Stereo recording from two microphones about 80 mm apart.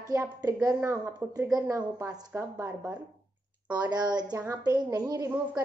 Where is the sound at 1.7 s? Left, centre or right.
Right.